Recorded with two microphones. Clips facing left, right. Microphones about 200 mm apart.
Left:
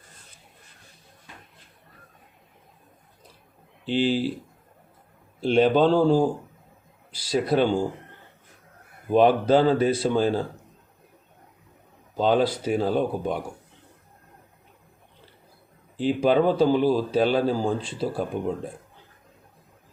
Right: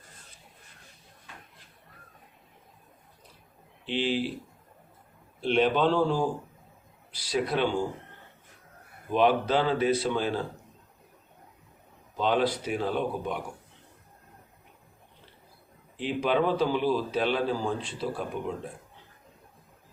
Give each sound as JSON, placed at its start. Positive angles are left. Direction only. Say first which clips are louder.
{"t": 3.8, "sound": "speech", "louder": "left 5 dB", "side_deg": 35}
{"t": 5.4, "sound": "speech", "louder": "left 5 dB", "side_deg": 35}
{"t": 7.3, "sound": "speech", "louder": "left 5 dB", "side_deg": 35}
{"t": 9.1, "sound": "speech", "louder": "left 6 dB", "side_deg": 40}
{"t": 12.1, "sound": "speech", "louder": "left 4 dB", "side_deg": 35}
{"t": 16.0, "sound": "speech", "louder": "left 6 dB", "side_deg": 35}